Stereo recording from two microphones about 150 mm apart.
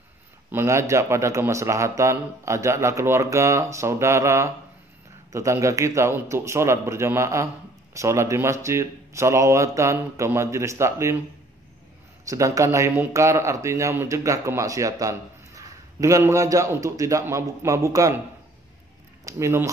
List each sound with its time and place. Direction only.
0.5 s speech: 15° right (ahead or behind)
12.3 s speech: 20° right (ahead or behind)
19.2 s speech: 20° right (ahead or behind)